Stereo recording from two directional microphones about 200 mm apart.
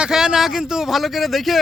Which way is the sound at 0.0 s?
5° right (ahead or behind).